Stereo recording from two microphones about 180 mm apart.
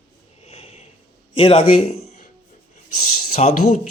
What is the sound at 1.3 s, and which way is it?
Speech, 30° left (ahead or behind).